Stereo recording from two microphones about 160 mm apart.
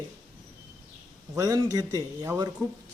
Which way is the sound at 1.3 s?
20° right (ahead or behind).